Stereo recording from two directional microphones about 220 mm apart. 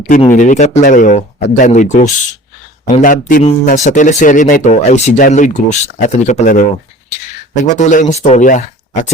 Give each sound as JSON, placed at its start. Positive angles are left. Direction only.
{"t": 0.2, "sound": "speech", "side_deg": 35}